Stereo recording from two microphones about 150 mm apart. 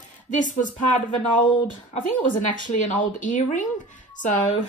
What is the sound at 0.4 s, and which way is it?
Speech, 55° left (ahead or behind).